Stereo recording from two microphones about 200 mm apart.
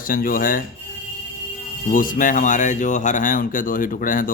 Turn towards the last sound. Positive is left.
turn(degrees=45)  # may be behind; listen again after turning